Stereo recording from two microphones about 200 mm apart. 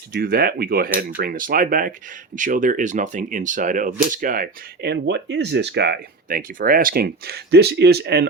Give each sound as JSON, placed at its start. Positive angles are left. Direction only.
{"t": 0.1, "sound": "speech", "side_deg": -50}